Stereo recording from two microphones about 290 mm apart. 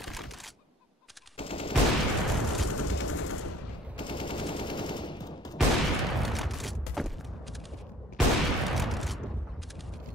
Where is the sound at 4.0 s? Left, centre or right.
Centre.